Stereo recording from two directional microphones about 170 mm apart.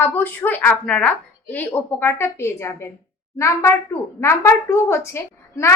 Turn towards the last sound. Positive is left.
turn(degrees=15)  # may be behind; listen again after turning